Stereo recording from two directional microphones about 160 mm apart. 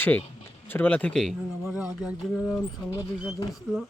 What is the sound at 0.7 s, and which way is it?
Speech, 10° left (ahead or behind).